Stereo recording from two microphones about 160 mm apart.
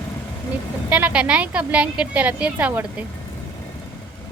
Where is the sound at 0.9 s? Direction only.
10° right (ahead or behind).